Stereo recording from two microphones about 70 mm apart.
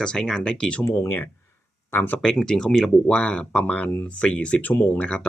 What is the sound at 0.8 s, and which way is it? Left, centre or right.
Speech, left.